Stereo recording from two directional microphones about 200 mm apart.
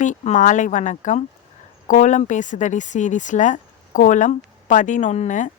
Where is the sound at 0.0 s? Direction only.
40° left (ahead or behind).